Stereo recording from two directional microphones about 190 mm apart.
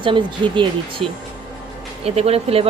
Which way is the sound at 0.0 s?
25° right (ahead or behind).